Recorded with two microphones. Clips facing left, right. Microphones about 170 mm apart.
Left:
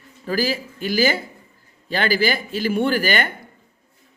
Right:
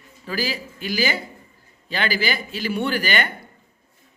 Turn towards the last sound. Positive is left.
turn(degrees=45)  # may be behind; listen again after turning